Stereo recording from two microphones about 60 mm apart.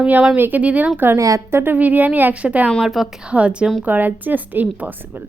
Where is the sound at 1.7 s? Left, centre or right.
Right.